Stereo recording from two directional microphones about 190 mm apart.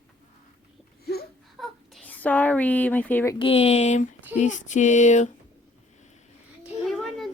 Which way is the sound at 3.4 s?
30° left (ahead or behind).